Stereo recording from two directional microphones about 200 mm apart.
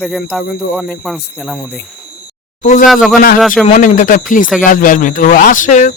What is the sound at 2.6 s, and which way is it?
Speech, 40° left (ahead or behind).